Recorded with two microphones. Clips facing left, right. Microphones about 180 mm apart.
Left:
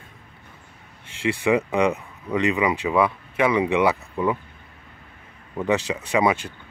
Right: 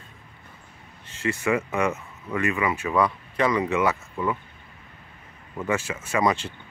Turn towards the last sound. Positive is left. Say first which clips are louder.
# left 3 dB
turn(degrees=15)  # may be behind; listen again after turning